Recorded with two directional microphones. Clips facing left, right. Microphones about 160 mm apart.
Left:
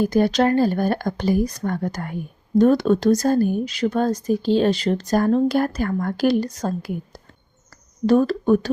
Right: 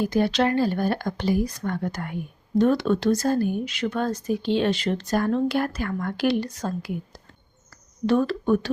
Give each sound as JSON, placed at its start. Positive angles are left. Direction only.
{"t": 0.0, "sound": "speech", "side_deg": 45}